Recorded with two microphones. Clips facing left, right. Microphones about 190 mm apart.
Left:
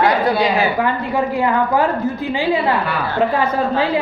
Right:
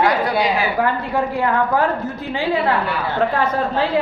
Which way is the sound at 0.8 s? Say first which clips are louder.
Left 1 dB; centre (ahead or behind).